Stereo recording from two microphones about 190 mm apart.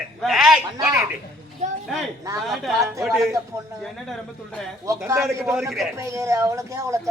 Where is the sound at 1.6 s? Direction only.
40° right (ahead or behind).